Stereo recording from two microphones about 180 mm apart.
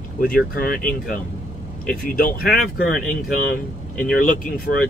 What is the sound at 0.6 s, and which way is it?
Speech, 50° left (ahead or behind).